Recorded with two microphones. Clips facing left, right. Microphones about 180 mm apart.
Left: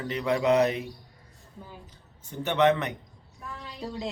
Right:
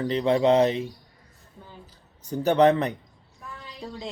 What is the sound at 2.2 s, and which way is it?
Speech, 40° right (ahead or behind).